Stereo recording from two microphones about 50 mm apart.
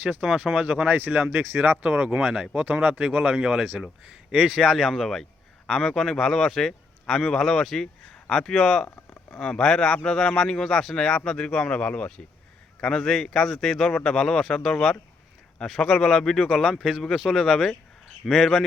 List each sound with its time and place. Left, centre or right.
0.0 s a man's voice: centre